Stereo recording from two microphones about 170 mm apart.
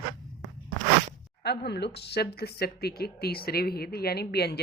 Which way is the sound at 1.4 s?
75° left (ahead or behind).